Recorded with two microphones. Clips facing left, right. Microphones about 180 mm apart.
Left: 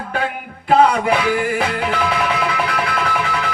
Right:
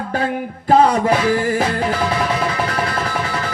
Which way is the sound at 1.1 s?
35° right (ahead or behind).